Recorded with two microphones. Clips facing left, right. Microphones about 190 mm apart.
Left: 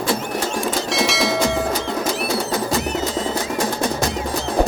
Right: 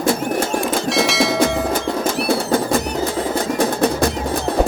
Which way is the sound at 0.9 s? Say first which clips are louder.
Right 4 dB; centre (ahead or behind).